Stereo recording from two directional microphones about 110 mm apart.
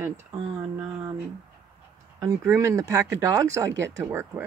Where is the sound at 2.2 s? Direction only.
25° right (ahead or behind).